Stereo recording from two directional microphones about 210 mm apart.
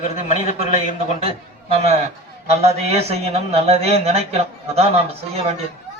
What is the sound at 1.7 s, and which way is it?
A man's voice, 30° right (ahead or behind).